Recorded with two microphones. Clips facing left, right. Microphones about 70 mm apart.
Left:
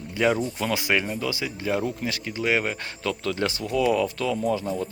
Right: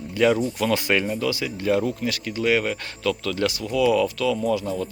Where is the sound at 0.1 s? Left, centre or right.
Centre.